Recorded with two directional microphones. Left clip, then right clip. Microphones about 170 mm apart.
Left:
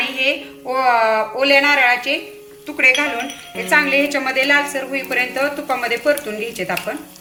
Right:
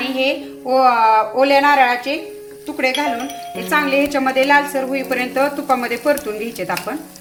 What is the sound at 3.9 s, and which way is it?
A woman's voice, 60° right (ahead or behind).